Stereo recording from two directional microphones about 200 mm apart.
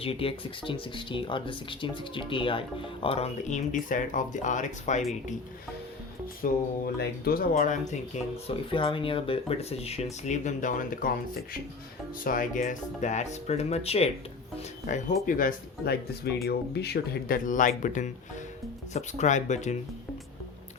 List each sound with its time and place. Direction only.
0.0 s speech: 30° left (ahead or behind)
6.4 s speech: 45° left (ahead or behind)
12.2 s speech: 45° left (ahead or behind)